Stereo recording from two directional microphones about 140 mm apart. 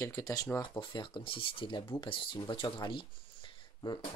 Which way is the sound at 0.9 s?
35° left (ahead or behind).